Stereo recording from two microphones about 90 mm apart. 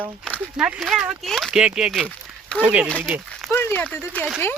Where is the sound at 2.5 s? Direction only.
15° right (ahead or behind).